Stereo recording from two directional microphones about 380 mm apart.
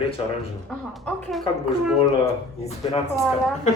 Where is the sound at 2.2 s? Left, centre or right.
Centre.